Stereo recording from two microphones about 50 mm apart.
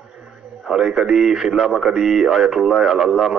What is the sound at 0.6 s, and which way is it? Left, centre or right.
Speech, centre.